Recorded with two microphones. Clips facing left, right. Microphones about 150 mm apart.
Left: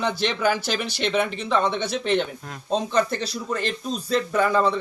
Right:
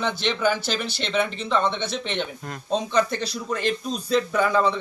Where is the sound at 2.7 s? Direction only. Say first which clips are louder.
Even; centre (ahead or behind).